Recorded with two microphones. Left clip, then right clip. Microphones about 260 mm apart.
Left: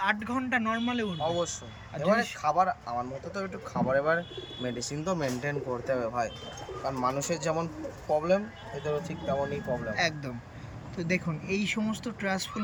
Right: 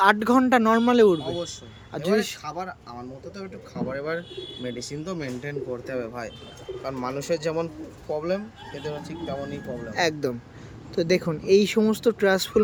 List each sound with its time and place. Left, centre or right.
0.0 s speech: centre
2.4 s speech: centre
3.8 s speech: centre
9.9 s speech: centre